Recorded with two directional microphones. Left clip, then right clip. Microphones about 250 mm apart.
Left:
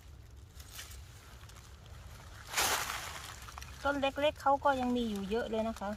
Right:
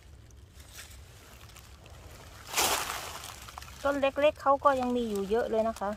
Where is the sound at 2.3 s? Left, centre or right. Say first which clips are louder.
Right 4 dB; right.